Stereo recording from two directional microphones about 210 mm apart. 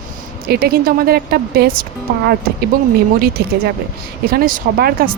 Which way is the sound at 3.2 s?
45° right (ahead or behind).